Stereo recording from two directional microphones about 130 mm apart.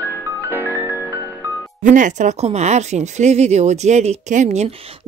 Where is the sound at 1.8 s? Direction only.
80° right; by 4.7 s 65° right (ahead or behind).